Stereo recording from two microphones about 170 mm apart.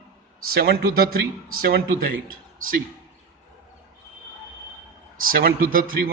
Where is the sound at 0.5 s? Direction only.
65° right (ahead or behind).